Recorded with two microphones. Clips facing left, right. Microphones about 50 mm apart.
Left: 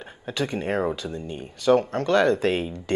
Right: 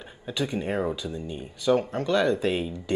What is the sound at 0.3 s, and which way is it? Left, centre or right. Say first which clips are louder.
Speech: left 2 dB; left.